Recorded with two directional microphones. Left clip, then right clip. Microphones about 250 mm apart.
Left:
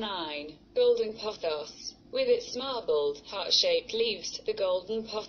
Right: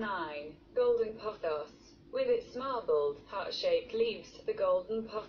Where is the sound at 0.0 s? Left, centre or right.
Left.